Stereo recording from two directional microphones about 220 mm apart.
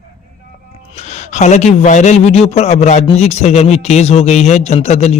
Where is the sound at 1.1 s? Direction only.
30° left (ahead or behind).